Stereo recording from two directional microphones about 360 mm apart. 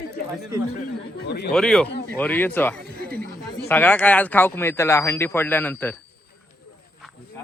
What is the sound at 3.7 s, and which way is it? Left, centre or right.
Speech, centre.